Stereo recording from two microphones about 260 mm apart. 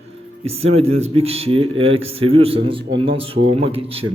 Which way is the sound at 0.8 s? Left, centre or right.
Right.